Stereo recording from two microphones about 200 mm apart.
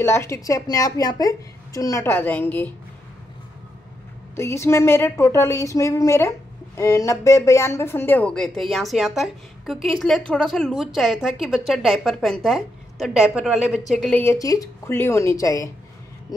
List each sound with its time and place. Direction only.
0.0 s a woman's voice: 15° left (ahead or behind)
4.4 s a woman's voice: 15° left (ahead or behind)